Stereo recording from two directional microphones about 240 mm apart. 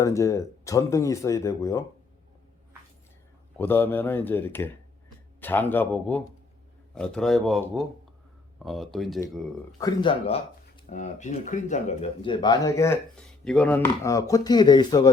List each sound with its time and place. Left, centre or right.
0.0 s speech: centre
3.6 s speech: centre
9.7 s speech: centre